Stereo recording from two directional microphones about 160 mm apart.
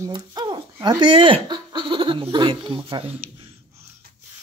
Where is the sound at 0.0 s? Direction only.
25° right (ahead or behind).